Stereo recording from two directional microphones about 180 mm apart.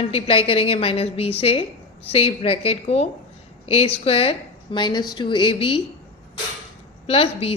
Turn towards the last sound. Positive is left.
turn(degrees=35)  # may be behind; listen again after turning